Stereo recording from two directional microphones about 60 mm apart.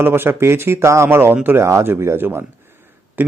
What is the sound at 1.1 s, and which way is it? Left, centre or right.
Speech, right.